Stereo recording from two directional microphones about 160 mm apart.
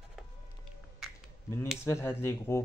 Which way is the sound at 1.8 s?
15° left (ahead or behind).